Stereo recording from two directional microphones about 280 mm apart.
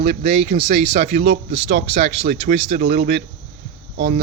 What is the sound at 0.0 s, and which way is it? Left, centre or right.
Speech, right.